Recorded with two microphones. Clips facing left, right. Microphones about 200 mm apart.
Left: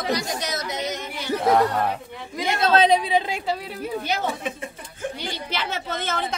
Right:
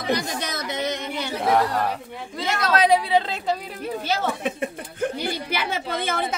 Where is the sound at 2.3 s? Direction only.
20° left (ahead or behind).